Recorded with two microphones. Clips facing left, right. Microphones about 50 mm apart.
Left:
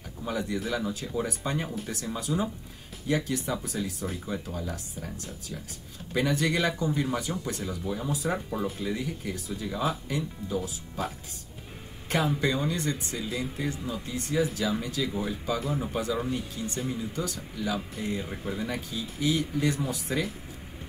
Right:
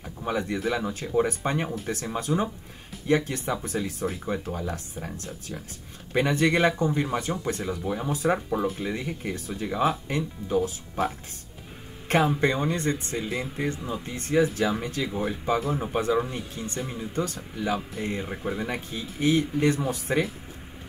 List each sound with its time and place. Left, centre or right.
0.0 s a sound: right
0.7 s speech: right
5.5 s speech: right
12.4 s speech: right
18.2 s speech: centre
18.5 s speech: right